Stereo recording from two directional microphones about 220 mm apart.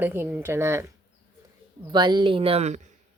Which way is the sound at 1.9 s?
20° right (ahead or behind).